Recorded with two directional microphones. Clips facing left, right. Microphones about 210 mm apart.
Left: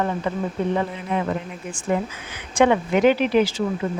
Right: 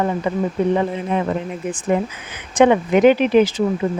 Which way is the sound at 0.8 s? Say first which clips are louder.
Right 4 dB; 25° right (ahead or behind).